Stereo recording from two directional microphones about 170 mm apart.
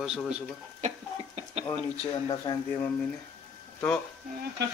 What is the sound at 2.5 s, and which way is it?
Speech, 25° left (ahead or behind).